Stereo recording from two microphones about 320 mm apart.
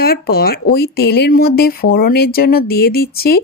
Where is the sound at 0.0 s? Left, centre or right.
Left.